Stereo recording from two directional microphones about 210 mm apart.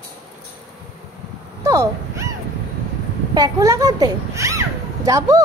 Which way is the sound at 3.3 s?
15° right (ahead or behind).